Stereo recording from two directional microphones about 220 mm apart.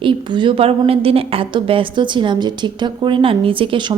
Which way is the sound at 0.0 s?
20° right (ahead or behind).